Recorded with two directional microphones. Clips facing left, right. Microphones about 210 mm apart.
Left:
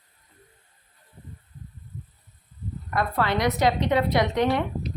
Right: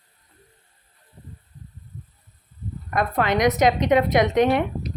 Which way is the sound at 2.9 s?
20° right (ahead or behind).